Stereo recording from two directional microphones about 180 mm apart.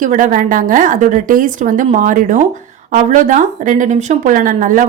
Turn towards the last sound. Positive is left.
turn(degrees=-50)  # may be behind; listen again after turning